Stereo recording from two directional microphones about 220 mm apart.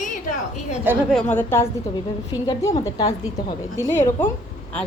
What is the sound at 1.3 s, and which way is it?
A woman's voice, 10° left (ahead or behind).